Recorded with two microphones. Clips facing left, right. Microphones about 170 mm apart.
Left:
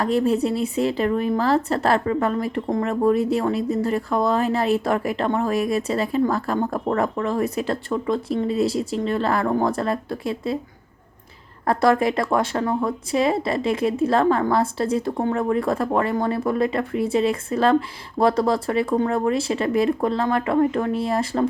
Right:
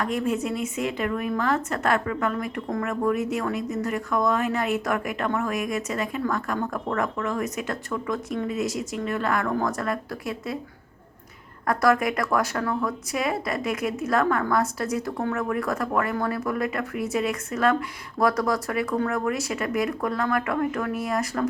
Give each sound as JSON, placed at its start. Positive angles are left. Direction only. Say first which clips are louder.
{"t": 0.0, "sound": "speech", "louder": "left 6 dB", "side_deg": 35}
{"t": 11.6, "sound": "speech", "louder": "left 3 dB", "side_deg": 30}